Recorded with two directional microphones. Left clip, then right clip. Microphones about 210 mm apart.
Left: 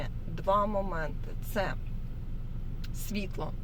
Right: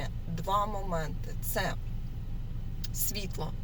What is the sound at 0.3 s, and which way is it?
Speech, 20° left (ahead or behind).